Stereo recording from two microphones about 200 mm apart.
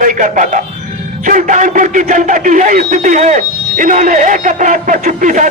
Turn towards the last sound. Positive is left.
turn(degrees=-40)  # may be behind; listen again after turning